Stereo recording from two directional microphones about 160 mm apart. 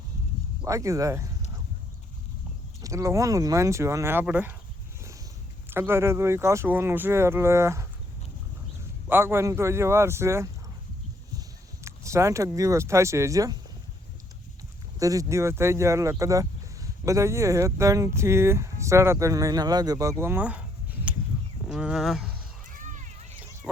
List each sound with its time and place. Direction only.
0.6 s speech: 20° right (ahead or behind)
2.8 s speech: 20° right (ahead or behind)
5.7 s speech: 15° right (ahead or behind)
9.0 s speech: 15° right (ahead or behind)
14.9 s speech: 20° right (ahead or behind)
21.7 s speech: 5° right (ahead or behind)
22.8 s a sound: 50° right (ahead or behind)